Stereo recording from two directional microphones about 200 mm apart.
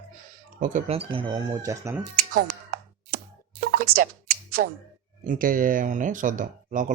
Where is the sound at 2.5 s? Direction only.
45° right (ahead or behind).